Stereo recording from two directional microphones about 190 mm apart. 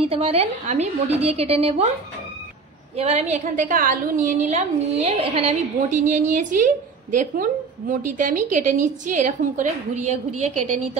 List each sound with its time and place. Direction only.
0.0 s a woman's voice: 30° right (ahead or behind)
3.0 s a woman's voice: 35° right (ahead or behind)
7.9 s a woman's voice: 45° right (ahead or behind)